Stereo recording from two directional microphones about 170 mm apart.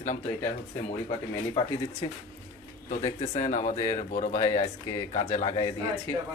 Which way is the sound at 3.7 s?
20° left (ahead or behind).